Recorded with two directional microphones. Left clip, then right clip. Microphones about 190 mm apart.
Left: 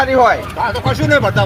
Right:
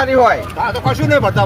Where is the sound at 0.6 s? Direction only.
10° right (ahead or behind).